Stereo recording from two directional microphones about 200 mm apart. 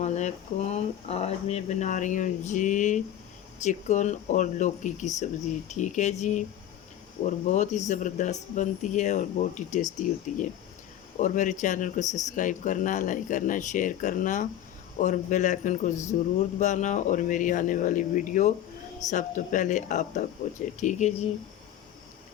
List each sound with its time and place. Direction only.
0.0 s speech: 35° left (ahead or behind)
7.5 s speech: 35° left (ahead or behind)